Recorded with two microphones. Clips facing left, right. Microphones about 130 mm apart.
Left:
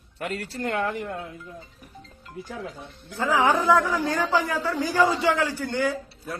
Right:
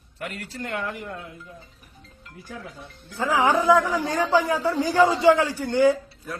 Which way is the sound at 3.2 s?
15° right (ahead or behind).